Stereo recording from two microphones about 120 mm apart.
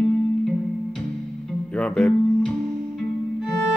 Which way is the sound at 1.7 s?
10° left (ahead or behind).